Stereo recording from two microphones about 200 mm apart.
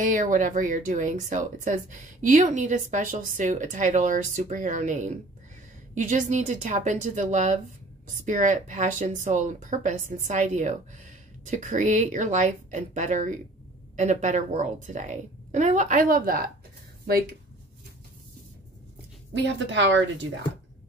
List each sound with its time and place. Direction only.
0.0 s speech: 40° right (ahead or behind)
19.4 s speech: 65° right (ahead or behind)